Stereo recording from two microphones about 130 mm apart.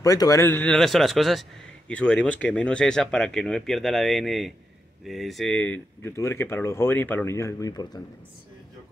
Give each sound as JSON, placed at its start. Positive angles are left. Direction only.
{"t": 0.0, "sound": "speech", "side_deg": 25}
{"t": 0.7, "sound": "speech", "side_deg": 0}